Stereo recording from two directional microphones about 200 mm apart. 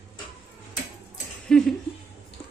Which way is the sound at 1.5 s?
Centre (ahead or behind).